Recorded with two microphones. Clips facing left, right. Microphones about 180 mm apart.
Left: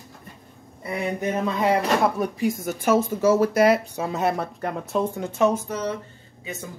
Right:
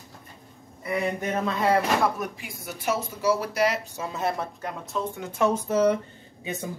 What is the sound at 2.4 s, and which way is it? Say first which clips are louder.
Speech: left 10 dB; 45° left (ahead or behind).